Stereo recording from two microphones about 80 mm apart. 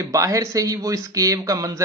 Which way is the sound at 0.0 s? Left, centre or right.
Right.